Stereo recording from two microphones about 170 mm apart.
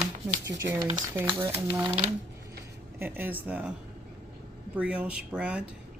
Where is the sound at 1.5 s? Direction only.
30° right (ahead or behind).